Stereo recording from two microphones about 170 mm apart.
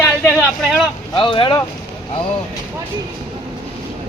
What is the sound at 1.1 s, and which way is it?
Speech, 30° left (ahead or behind).